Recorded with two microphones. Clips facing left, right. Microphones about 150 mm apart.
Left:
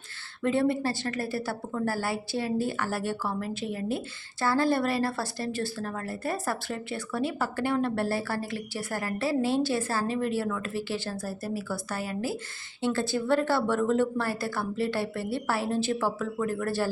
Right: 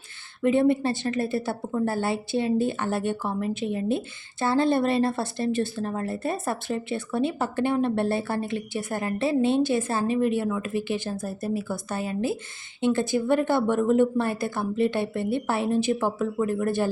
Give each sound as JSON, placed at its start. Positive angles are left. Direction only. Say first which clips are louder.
{"t": 0.4, "sound": "a woman's voice", "louder": "right 5 dB", "side_deg": -20}